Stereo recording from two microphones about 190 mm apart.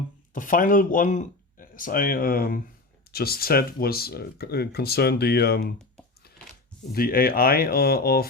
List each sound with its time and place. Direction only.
0.3 s speech: 45° left (ahead or behind)
6.9 s speech: 50° left (ahead or behind)